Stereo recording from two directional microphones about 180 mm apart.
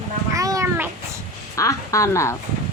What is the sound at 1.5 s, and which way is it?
Speech, 15° left (ahead or behind).